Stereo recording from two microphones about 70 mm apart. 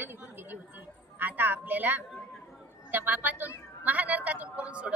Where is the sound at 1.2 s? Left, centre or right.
Right.